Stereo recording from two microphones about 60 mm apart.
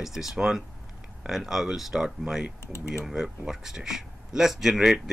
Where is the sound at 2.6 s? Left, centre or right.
Left.